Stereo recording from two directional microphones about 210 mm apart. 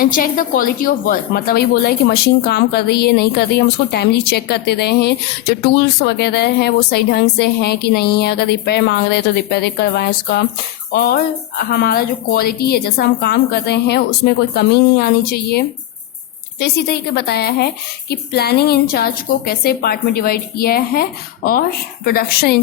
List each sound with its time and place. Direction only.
0.0 s speech: 40° left (ahead or behind)